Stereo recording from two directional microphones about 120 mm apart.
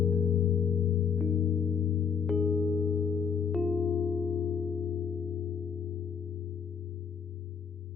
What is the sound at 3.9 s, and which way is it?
Singing bowl, 10° right (ahead or behind).